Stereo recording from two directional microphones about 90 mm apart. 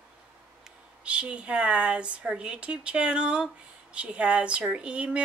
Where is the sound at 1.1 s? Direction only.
10° right (ahead or behind).